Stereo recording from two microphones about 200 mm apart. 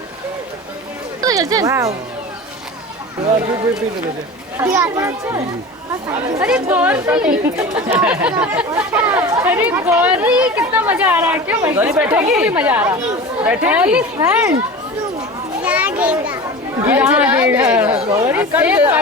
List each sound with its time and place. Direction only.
1.2 s speech: 15° right (ahead or behind)
4.5 s speech: 10° right (ahead or behind)
15.6 s children playing: 5° right (ahead or behind)
16.8 s speech: 10° right (ahead or behind)